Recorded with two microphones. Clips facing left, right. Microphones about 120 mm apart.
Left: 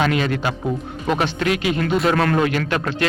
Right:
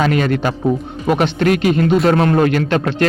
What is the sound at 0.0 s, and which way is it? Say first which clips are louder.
A man's voice: right 4 dB; 45° right (ahead or behind).